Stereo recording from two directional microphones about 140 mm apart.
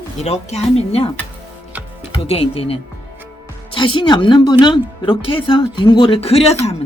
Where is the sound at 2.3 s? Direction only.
45° left (ahead or behind).